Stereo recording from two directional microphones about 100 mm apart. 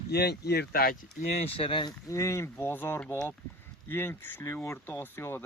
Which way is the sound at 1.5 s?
60° left (ahead or behind).